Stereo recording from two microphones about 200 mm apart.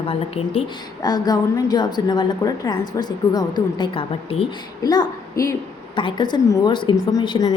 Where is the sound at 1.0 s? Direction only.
20° left (ahead or behind).